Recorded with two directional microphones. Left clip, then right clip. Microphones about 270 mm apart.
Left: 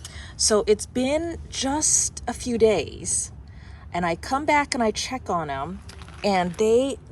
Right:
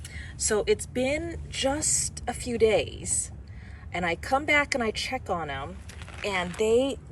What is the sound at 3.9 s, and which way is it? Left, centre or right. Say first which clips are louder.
A woman's voice: left 2 dB; centre.